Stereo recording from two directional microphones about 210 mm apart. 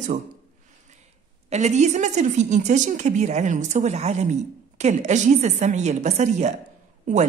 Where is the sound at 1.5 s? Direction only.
35° right (ahead or behind).